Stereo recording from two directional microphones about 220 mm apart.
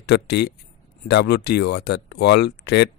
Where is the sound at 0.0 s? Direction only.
50° left (ahead or behind).